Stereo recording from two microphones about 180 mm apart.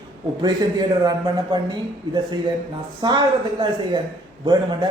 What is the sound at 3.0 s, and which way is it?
Speech, 25° right (ahead or behind).